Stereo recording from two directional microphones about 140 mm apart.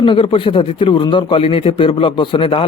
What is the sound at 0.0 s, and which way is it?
Speech, 35° left (ahead or behind).